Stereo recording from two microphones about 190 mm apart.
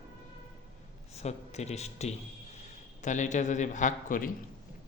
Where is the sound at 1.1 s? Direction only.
35° left (ahead or behind).